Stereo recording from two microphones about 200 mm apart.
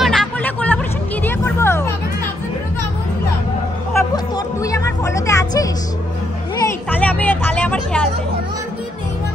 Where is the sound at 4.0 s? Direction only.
15° left (ahead or behind).